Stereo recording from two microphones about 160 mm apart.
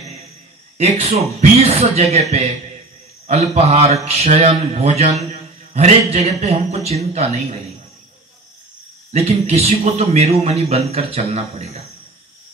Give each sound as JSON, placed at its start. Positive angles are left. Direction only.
{"t": 0.7, "sound": "a man's voice", "side_deg": -40}
{"t": 9.1, "sound": "a man's voice", "side_deg": -40}